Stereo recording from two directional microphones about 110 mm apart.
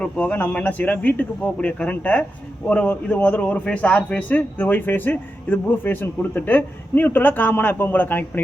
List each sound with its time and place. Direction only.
0.0 s a man's voice: 10° left (ahead or behind)